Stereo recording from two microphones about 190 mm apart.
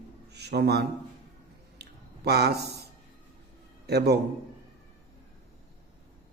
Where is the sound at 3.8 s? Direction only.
60° right (ahead or behind).